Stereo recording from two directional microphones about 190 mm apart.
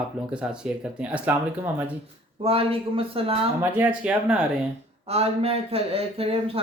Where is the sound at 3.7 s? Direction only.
5° right (ahead or behind).